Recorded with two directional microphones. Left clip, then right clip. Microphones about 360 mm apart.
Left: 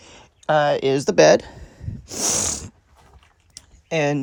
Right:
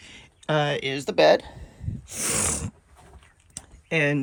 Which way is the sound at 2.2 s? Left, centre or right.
Centre.